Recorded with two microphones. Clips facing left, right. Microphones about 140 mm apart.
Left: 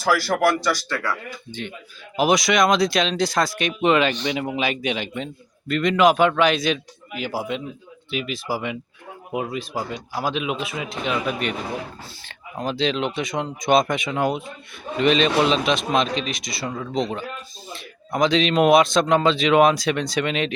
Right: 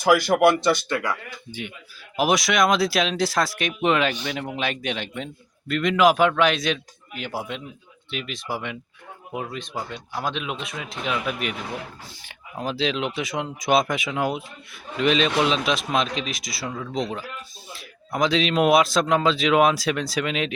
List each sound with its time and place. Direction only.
0.0 s speech: 20° right (ahead or behind); by 20.5 s centre (ahead or behind)